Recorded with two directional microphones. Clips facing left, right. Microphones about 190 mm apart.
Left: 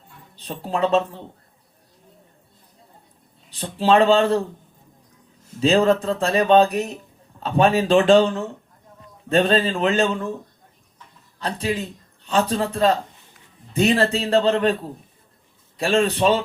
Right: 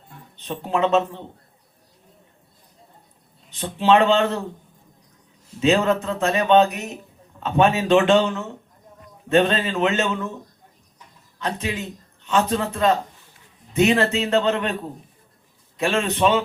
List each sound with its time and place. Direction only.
0.3 s a man's voice: 35° left (ahead or behind)
3.5 s a man's voice: 35° left (ahead or behind)
5.5 s a man's voice: 35° left (ahead or behind)
11.3 s a man's voice: 35° left (ahead or behind)
15.8 s a man's voice: 35° left (ahead or behind)